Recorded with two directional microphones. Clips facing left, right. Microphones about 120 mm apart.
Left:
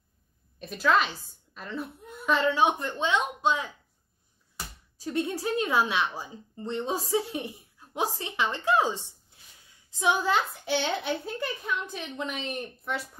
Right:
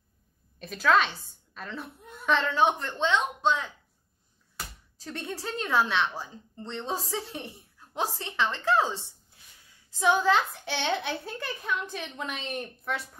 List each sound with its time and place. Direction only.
0.6 s a child's voice: 5° left (ahead or behind)
4.9 s a woman's voice: 10° left (ahead or behind)
10.6 s a child's voice: centre (ahead or behind)